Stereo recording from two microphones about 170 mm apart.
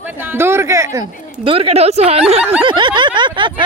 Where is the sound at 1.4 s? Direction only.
35° right (ahead or behind).